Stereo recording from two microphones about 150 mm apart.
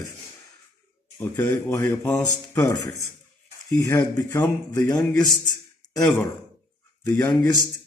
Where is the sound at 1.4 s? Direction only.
20° left (ahead or behind).